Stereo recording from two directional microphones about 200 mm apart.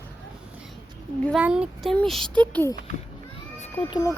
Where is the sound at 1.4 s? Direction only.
5° right (ahead or behind).